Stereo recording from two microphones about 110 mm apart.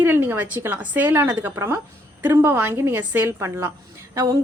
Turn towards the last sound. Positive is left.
turn(degrees=-30)  # may be behind; listen again after turning